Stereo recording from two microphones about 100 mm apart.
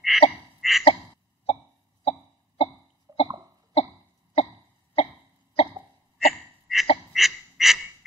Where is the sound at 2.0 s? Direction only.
70° left (ahead or behind).